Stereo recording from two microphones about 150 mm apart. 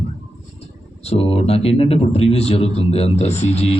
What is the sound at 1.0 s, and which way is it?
Speech, 40° left (ahead or behind).